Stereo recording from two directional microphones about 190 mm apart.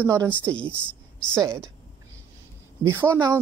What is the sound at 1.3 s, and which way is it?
Speech, 15° right (ahead or behind).